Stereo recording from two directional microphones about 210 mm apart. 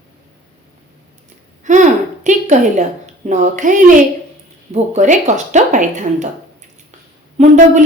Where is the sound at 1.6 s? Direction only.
35° right (ahead or behind).